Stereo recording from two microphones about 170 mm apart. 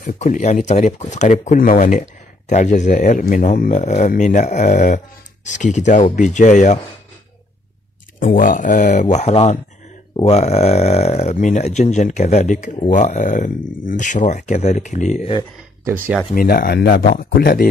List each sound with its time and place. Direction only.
0.0 s speech: 45° left (ahead or behind)
8.2 s speech: 50° left (ahead or behind)
16.3 s speech: 60° left (ahead or behind)